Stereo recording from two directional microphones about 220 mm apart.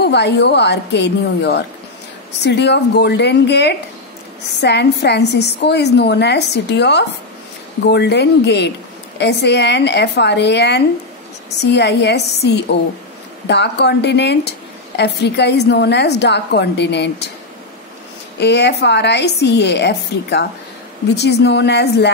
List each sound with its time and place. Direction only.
0.0 s a woman's voice: 50° left (ahead or behind)
18.4 s a woman's voice: 50° left (ahead or behind)